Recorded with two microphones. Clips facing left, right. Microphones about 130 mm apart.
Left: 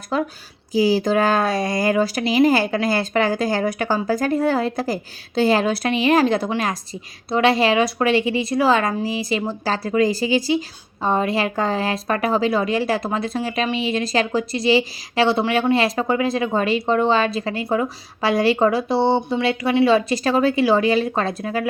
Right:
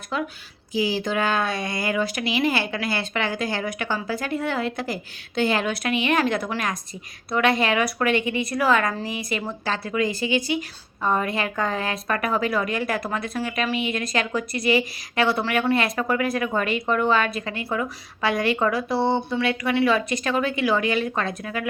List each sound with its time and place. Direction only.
0.1 s a woman's voice: 40° left (ahead or behind)